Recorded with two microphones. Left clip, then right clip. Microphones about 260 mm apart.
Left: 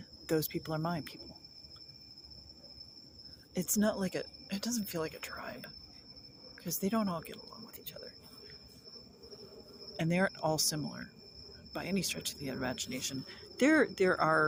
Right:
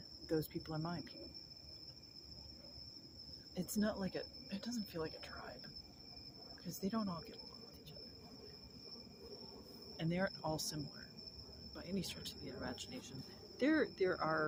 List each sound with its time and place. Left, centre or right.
0.3 s speech: left
3.5 s speech: left
10.0 s speech: left